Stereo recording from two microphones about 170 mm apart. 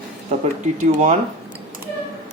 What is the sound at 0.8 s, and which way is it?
Speech, 40° right (ahead or behind).